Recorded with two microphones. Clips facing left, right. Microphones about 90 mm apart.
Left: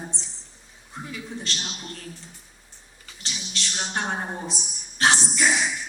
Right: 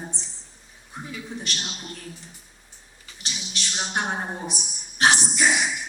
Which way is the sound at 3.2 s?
15° right (ahead or behind).